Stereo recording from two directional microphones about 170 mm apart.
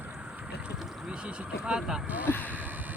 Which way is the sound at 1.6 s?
5° right (ahead or behind).